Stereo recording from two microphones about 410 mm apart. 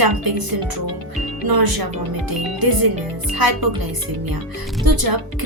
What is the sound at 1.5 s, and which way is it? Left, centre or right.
Speech, right.